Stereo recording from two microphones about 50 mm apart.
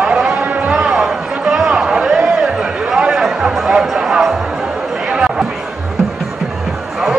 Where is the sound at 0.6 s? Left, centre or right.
Centre.